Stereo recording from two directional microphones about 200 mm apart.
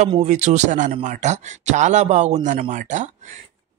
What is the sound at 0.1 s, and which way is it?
A man's voice, 35° right (ahead or behind).